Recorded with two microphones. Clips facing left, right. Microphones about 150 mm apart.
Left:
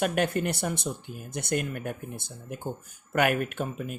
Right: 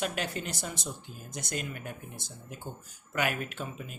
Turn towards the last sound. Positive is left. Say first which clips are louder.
# left 7 dB
turn(degrees=55)  # may be behind; listen again after turning